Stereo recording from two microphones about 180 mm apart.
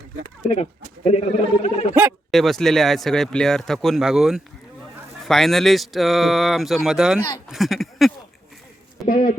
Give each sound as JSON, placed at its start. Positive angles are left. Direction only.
{"t": 0.5, "sound": "speech", "side_deg": 35}
{"t": 1.6, "sound": "a sound", "side_deg": 40}
{"t": 2.0, "sound": "speech", "side_deg": -5}
{"t": 7.3, "sound": "speech", "side_deg": 15}
{"t": 7.5, "sound": "speech", "side_deg": 0}
{"t": 9.0, "sound": "speech", "side_deg": 50}